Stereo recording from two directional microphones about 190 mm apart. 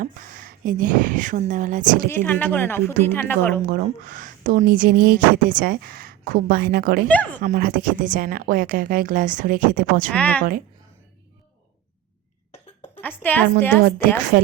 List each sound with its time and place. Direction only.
0.0 s speech: 45° right (ahead or behind)
2.0 s a woman's voice: 10° left (ahead or behind)
3.7 s speech: 45° right (ahead or behind)
7.1 s a woman's voice: 10° left (ahead or behind)
7.4 s speech: 45° right (ahead or behind)
10.1 s a woman's voice: 5° left (ahead or behind)
13.0 s a woman's voice: 10° left (ahead or behind)